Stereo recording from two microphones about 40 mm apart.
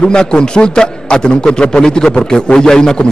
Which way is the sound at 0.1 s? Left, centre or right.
Centre.